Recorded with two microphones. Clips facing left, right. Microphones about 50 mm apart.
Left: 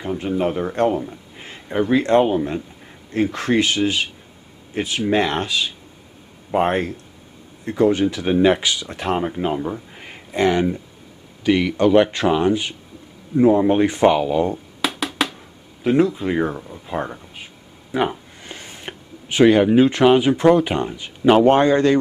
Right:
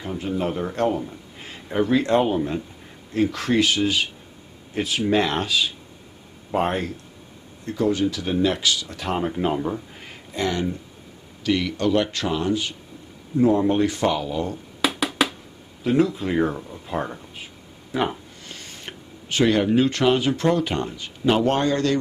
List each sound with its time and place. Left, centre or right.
0.0 s speech: centre
6.7 s speech: left
9.2 s speech: centre
9.9 s a sound: centre
10.3 s speech: left
14.8 s music: centre
15.8 s speech: centre
16.1 s speech: centre